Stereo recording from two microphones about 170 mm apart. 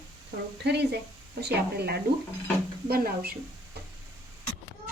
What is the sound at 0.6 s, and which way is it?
Speech, 75° right (ahead or behind).